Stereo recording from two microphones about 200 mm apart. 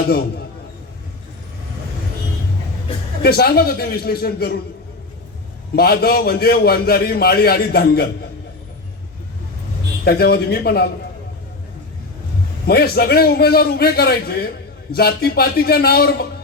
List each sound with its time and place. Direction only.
3.2 s a man's voice: 50° left (ahead or behind)
5.7 s a man's voice: 50° left (ahead or behind)
10.0 s a man's voice: 50° left (ahead or behind)
12.6 s a man's voice: 50° left (ahead or behind)